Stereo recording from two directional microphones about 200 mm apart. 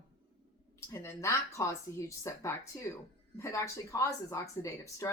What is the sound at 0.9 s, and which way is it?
A woman's voice, 15° left (ahead or behind).